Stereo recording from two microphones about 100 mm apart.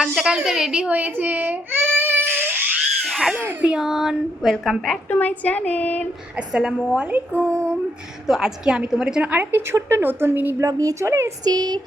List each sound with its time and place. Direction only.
0.0 s a woman's voice: 10° right (ahead or behind)
2.0 s a sound: 20° right (ahead or behind)
3.1 s a child's voice: centre (ahead or behind)
3.3 s a sound: 20° right (ahead or behind)
3.7 s female singing: 5° right (ahead or behind)
5.1 s speech: 15° left (ahead or behind)
6.5 s a woman's voice: 5° right (ahead or behind)
6.9 s a sound: 15° right (ahead or behind)
8.3 s a woman's voice: 5° right (ahead or behind); by 10.5 s 20° right (ahead or behind)
10.6 s a child's voice: 35° right (ahead or behind)
11.4 s a child's voice: 40° right (ahead or behind)